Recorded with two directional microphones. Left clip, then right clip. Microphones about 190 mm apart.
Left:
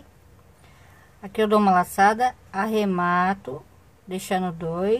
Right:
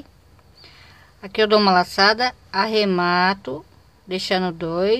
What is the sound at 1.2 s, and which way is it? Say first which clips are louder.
A woman's voice: right 4 dB; 20° right (ahead or behind).